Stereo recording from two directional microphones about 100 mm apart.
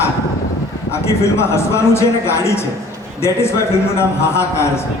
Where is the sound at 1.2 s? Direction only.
25° left (ahead or behind).